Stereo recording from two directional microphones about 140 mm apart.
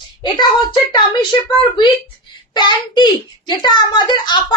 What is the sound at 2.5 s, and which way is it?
A child's voice, 30° left (ahead or behind).